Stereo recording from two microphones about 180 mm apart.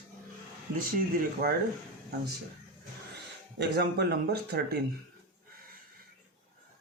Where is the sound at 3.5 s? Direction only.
70° right (ahead or behind).